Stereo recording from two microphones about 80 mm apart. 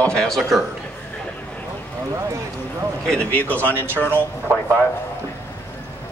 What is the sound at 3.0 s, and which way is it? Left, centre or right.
Speech, centre.